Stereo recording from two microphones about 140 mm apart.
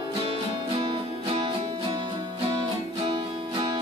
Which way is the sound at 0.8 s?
40° right (ahead or behind).